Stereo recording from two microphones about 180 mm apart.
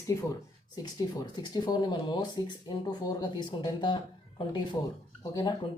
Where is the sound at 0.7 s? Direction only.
20° left (ahead or behind).